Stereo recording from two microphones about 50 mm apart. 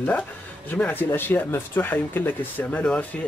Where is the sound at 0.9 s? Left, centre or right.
Left.